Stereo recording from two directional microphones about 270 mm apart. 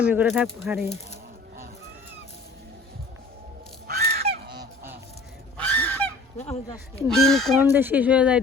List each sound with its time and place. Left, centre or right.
0.0 s speech: centre
3.8 s goose: right
4.6 s goose: centre
5.5 s goose: centre
7.1 s speech: centre